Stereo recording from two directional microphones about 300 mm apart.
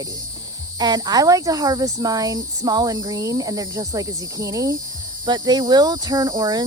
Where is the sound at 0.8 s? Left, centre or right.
Centre.